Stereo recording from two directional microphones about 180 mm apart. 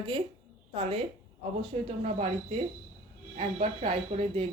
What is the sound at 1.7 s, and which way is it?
Speech, 35° right (ahead or behind).